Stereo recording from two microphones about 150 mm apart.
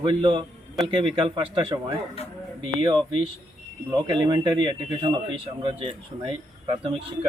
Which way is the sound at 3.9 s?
30° right (ahead or behind).